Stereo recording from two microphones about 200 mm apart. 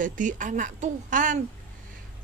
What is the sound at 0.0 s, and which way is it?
A woman's voice, 40° right (ahead or behind).